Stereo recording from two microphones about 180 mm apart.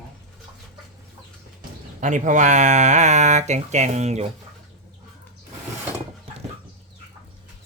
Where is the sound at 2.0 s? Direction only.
45° right (ahead or behind).